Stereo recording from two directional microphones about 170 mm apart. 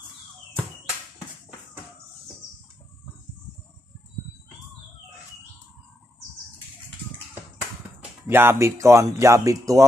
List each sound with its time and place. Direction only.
8.3 s speech: 15° right (ahead or behind)